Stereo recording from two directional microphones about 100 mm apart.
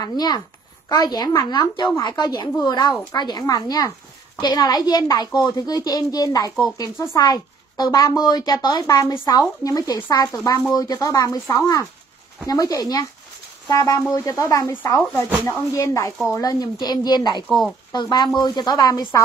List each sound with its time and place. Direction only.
0.0 s a woman's voice: 40° left (ahead or behind)
17.5 s speech: 5° left (ahead or behind)
18.1 s speech: 45° left (ahead or behind)